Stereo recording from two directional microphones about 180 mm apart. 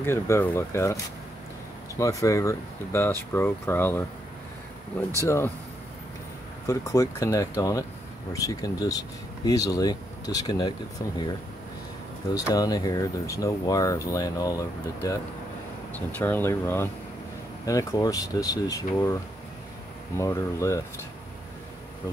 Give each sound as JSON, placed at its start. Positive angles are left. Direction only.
{"t": 0.0, "sound": "speech", "side_deg": 15}
{"t": 2.0, "sound": "speech", "side_deg": 15}
{"t": 5.2, "sound": "speech", "side_deg": 15}
{"t": 6.6, "sound": "speech", "side_deg": 20}
{"t": 12.4, "sound": "speech", "side_deg": 20}